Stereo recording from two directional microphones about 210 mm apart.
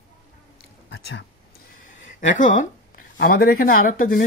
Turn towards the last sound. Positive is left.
turn(degrees=40)  # may be behind; listen again after turning